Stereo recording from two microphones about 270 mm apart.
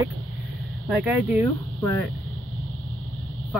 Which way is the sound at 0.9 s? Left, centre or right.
Centre.